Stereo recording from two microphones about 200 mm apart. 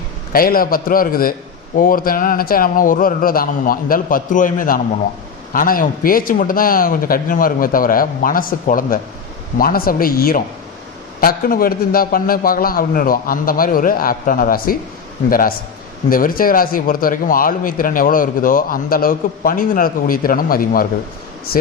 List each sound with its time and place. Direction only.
0.3 s speech: 45° left (ahead or behind)